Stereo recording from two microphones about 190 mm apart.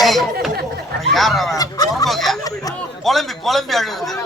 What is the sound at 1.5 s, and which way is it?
Speech, 20° left (ahead or behind).